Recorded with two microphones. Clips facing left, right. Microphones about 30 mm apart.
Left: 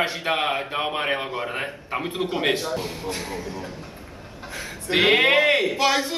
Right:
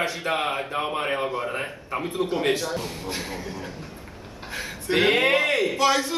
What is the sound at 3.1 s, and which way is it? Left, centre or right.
Speech, centre.